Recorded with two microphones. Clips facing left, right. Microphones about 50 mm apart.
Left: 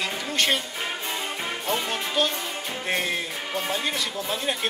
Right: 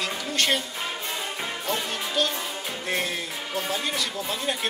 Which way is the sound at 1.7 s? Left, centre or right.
Left.